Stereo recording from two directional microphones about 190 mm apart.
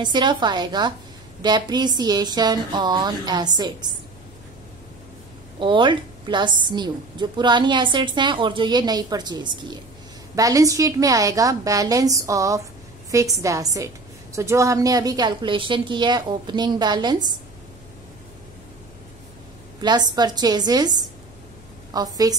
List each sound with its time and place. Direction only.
0.0 s a woman's voice: 25° right (ahead or behind)
5.6 s a woman's voice: 25° right (ahead or behind)
19.8 s a woman's voice: 20° right (ahead or behind)